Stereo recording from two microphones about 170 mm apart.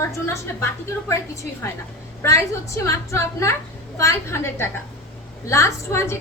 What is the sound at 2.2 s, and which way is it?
A woman's voice, 15° left (ahead or behind).